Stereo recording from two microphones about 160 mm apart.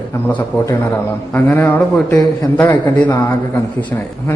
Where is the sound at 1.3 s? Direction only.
10° left (ahead or behind).